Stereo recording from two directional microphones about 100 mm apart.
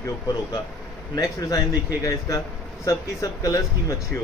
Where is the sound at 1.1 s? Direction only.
40° left (ahead or behind).